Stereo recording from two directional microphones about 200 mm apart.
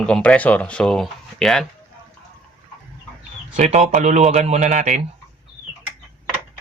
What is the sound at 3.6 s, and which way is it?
Speech, 35° right (ahead or behind).